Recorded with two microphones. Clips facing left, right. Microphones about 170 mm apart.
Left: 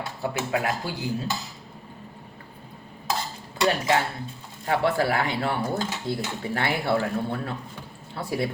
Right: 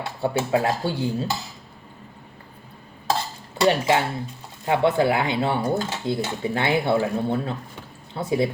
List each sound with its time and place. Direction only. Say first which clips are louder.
0.2 s speech: right 5 dB; 30° right (ahead or behind)
3.6 s speech: right 3 dB; 25° right (ahead or behind)